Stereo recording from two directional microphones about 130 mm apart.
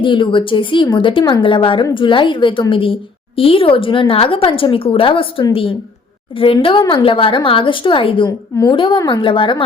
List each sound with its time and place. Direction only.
0.0 s a woman's voice: 40° left (ahead or behind)